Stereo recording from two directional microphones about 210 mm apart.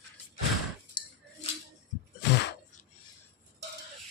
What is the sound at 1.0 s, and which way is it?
Cutlery, 20° left (ahead or behind).